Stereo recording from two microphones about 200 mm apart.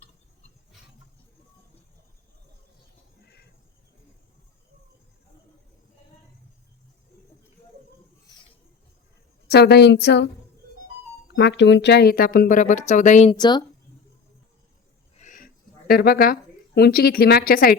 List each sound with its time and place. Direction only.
9.5 s a woman's voice: 55° left (ahead or behind)
11.3 s speech: 60° left (ahead or behind); by 13.3 s 35° left (ahead or behind)
13.3 s speech: 20° left (ahead or behind)
15.2 s a sound: 40° left (ahead or behind)